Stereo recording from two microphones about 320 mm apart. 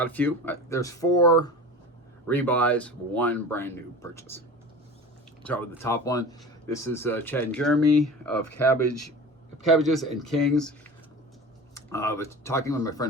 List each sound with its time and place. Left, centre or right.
0.0 s speech: centre
5.4 s speech: centre
8.9 s speech: right
9.6 s speech: centre